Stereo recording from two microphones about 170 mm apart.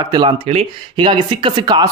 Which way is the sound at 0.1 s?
25° right (ahead or behind).